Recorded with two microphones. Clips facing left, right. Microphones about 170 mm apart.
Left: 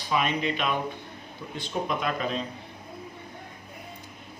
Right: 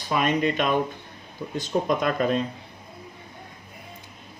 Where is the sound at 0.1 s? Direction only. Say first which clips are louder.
Right 4 dB; 50° right (ahead or behind).